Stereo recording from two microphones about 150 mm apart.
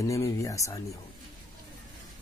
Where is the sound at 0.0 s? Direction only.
20° left (ahead or behind).